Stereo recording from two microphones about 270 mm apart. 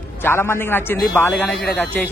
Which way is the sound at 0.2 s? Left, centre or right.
Centre.